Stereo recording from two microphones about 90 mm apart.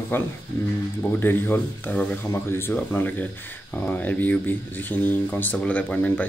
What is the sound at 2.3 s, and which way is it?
Speech, 30° left (ahead or behind).